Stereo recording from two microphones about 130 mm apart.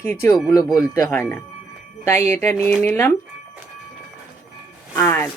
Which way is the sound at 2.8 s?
15° left (ahead or behind).